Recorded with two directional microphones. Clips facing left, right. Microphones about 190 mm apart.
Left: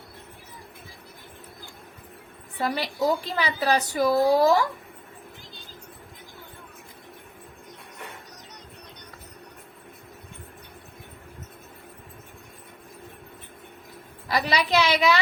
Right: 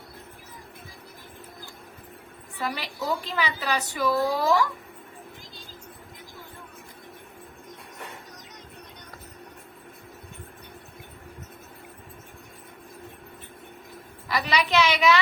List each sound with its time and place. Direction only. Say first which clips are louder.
2.6 s a woman's voice: left 6 dB; 40° left (ahead or behind)
14.3 s a woman's voice: left 1 dB; 35° left (ahead or behind)